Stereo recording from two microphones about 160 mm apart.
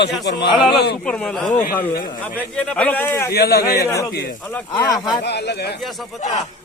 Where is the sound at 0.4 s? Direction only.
30° left (ahead or behind).